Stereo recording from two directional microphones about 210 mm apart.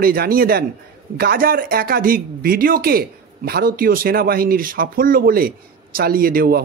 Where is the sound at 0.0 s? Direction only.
45° right (ahead or behind).